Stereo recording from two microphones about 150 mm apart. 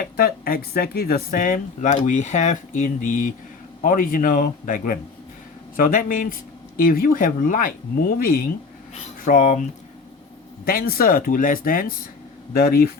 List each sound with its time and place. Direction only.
0.0 s speech: 90° left; by 7.7 s 65° left (ahead or behind)
9.2 s speech: 55° left (ahead or behind)
10.7 s speech: 80° left